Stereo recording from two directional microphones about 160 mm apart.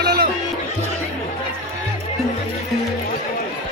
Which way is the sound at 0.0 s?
75° right (ahead or behind).